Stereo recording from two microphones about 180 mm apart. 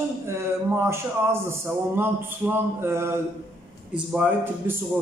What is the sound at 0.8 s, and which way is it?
A man's voice, 15° right (ahead or behind).